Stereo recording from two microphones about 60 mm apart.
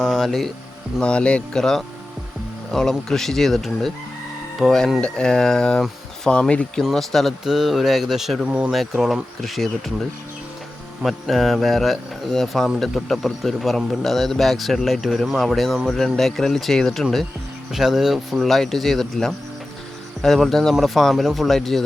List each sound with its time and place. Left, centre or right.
0.0 s speech: centre
1.0 s speech: centre
4.6 s speech: centre
4.9 s speech: centre
11.0 s speech: centre
17.7 s speech: centre